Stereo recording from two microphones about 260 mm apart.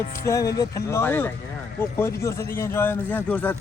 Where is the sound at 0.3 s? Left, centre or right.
Centre.